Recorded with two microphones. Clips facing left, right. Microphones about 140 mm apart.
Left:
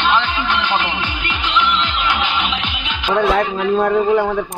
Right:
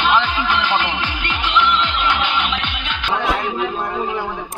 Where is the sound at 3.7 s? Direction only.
65° left (ahead or behind).